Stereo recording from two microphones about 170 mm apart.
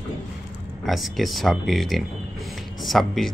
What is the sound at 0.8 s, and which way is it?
Speech, centre (ahead or behind).